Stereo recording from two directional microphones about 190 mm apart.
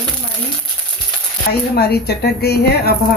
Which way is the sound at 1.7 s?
55° left (ahead or behind).